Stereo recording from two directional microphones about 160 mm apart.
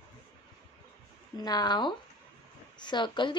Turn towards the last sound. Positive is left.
turn(degrees=30)  # may be behind; listen again after turning